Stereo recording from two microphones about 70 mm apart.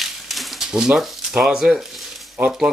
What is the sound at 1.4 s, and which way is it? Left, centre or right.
Speech, centre.